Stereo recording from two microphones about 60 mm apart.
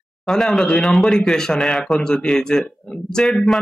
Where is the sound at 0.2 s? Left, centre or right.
Centre.